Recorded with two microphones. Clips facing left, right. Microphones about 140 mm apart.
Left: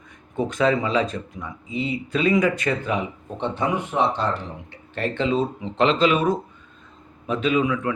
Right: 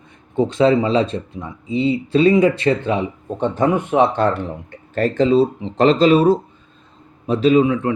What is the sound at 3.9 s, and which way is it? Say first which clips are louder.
Speech: right 7 dB; 55° right (ahead or behind).